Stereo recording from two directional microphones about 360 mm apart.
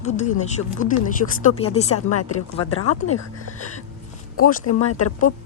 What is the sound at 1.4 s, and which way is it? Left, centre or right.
Speech, centre.